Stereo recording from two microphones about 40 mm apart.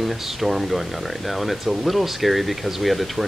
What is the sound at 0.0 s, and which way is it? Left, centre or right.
Speech, centre.